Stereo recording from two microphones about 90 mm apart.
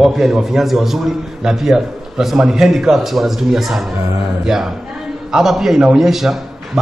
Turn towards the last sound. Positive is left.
turn(degrees=-5)  # may be behind; listen again after turning